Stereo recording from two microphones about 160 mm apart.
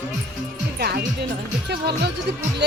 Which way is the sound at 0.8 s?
85° right.